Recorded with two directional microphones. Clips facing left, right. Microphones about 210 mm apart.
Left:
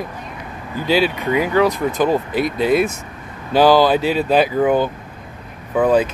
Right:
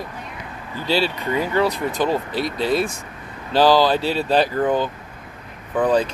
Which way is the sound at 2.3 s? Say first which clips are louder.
Left 4 dB; 50° left (ahead or behind).